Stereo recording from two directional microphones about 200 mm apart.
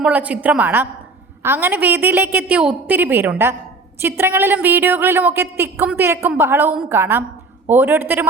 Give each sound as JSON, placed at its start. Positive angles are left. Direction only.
{"t": 0.0, "sound": "a woman's voice", "side_deg": -5}